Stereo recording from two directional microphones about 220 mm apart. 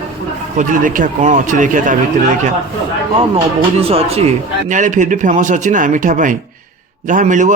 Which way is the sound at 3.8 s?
25° right (ahead or behind).